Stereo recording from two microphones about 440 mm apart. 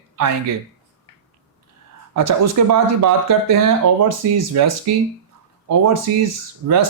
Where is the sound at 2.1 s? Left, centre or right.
Right.